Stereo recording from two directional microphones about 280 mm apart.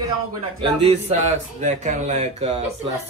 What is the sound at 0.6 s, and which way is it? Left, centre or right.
Speech, right.